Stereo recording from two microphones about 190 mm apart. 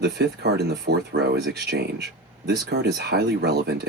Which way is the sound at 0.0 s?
60° right (ahead or behind).